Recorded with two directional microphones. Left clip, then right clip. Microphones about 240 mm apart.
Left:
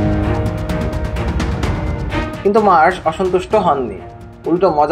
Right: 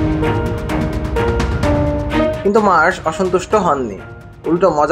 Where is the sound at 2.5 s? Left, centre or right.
Centre.